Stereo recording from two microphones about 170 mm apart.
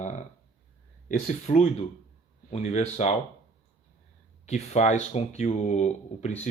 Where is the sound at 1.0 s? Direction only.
45° left (ahead or behind).